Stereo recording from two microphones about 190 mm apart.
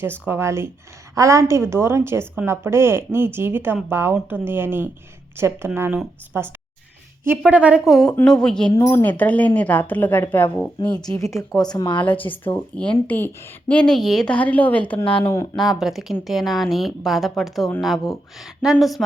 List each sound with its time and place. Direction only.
0.0 s a woman's voice: 10° right (ahead or behind)
8.7 s a woman's voice: 15° left (ahead or behind)
12.7 s a woman's voice: 5° left (ahead or behind)
15.8 s speech: centre (ahead or behind)